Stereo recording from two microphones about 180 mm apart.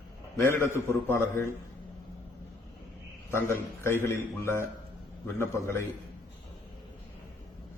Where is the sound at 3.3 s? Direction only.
15° left (ahead or behind).